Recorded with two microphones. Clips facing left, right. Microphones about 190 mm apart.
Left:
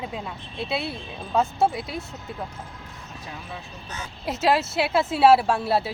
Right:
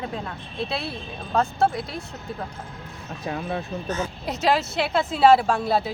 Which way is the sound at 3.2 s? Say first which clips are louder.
Right 11 dB; 60° right (ahead or behind).